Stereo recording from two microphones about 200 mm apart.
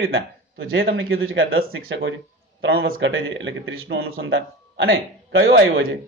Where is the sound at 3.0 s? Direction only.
75° right (ahead or behind).